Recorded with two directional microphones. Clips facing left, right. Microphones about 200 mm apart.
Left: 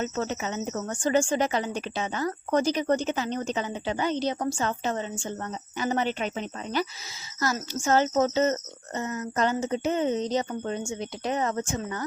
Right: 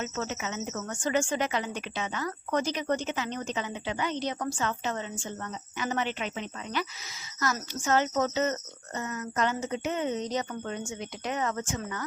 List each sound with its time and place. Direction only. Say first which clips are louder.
0.0 s speech: left 4 dB; 35° left (ahead or behind)